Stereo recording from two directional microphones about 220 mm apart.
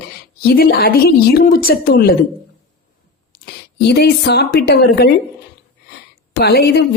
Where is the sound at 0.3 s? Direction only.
45° left (ahead or behind).